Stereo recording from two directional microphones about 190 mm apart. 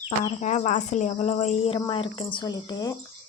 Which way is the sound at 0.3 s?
40° left (ahead or behind).